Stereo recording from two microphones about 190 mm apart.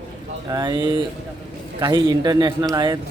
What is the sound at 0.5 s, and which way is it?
A man's voice, 20° right (ahead or behind).